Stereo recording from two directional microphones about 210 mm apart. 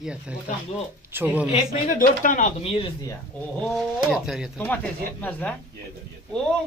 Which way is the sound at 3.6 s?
Centre (ahead or behind).